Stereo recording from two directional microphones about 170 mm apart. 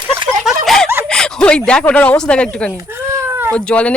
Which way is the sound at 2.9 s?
15° right (ahead or behind).